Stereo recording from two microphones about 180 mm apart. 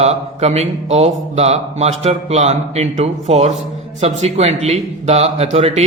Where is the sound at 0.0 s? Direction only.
35° right (ahead or behind).